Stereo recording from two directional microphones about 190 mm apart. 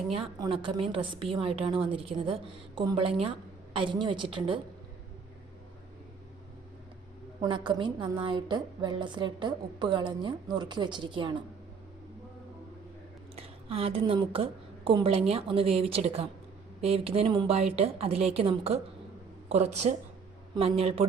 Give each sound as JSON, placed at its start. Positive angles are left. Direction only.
{"t": 0.1, "sound": "a woman's voice", "side_deg": -25}
{"t": 7.4, "sound": "a woman's voice", "side_deg": -25}
{"t": 13.3, "sound": "a woman's voice", "side_deg": -30}